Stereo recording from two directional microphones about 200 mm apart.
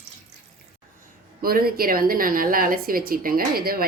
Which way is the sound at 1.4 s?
50° right (ahead or behind).